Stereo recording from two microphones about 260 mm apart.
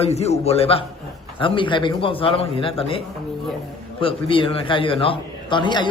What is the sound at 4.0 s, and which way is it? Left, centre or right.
A man's voice, centre.